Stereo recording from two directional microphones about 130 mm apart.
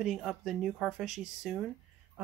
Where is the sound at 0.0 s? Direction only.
5° right (ahead or behind).